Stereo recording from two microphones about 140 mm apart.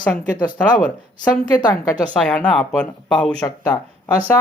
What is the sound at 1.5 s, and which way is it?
Speech, 30° left (ahead or behind).